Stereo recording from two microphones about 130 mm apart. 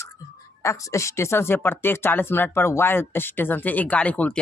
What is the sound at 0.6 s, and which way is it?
Speech, 20° left (ahead or behind).